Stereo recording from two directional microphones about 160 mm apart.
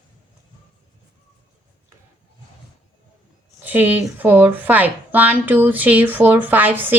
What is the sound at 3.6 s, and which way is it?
A woman's voice, 10° right (ahead or behind).